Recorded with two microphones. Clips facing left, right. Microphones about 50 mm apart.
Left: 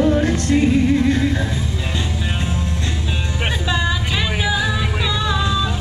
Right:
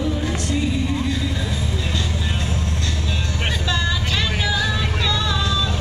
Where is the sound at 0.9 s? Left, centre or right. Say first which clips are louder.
Left 7 dB; left.